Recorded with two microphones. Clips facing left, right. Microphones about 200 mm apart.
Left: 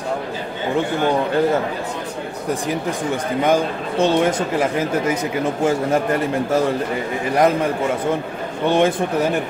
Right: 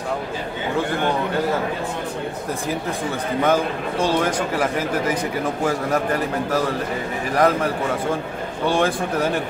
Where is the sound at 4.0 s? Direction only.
25° left (ahead or behind).